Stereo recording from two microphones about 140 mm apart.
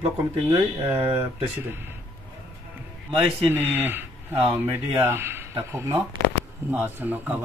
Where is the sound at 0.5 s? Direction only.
15° right (ahead or behind).